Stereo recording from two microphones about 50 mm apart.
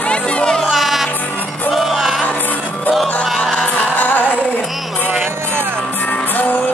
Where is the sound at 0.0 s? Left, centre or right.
Left.